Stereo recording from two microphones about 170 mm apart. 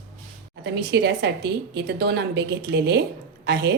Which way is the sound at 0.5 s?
90° right.